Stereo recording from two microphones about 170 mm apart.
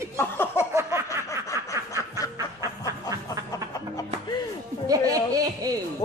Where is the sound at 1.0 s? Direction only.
20° left (ahead or behind).